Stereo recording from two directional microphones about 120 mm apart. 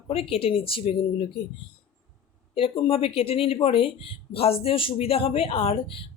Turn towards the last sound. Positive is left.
turn(degrees=50)  # may be behind; listen again after turning